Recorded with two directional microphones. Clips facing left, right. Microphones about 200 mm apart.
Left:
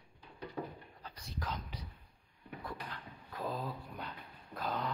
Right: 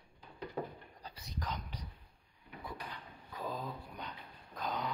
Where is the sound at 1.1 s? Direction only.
Centre (ahead or behind).